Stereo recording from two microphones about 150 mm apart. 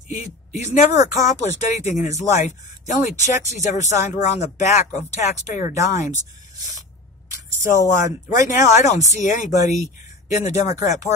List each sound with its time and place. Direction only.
0.1 s speech: 50° left (ahead or behind)
7.9 s speech: 60° left (ahead or behind)